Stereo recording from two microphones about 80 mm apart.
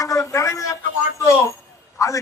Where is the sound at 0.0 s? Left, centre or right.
Left.